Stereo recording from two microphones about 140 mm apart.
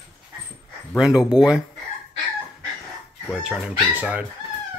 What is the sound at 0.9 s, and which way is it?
Speech, 5° right (ahead or behind).